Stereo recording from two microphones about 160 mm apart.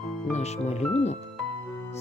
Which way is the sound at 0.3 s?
45° left (ahead or behind).